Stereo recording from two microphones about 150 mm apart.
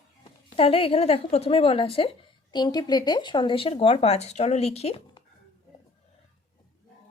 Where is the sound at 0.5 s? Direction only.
40° left (ahead or behind).